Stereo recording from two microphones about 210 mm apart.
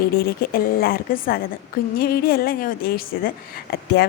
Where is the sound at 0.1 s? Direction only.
45° left (ahead or behind).